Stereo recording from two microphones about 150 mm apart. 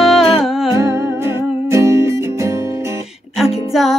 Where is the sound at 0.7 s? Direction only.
20° right (ahead or behind).